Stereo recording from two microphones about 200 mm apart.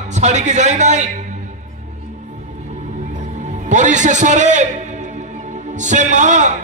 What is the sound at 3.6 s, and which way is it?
A man's voice, 35° right (ahead or behind).